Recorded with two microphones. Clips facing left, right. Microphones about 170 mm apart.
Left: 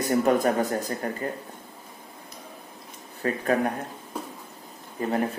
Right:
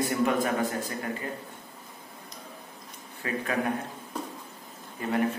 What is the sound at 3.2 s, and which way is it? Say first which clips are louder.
Speech: left 5 dB; 40° left (ahead or behind).